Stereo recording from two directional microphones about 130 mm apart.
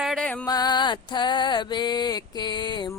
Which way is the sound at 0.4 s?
30° left (ahead or behind).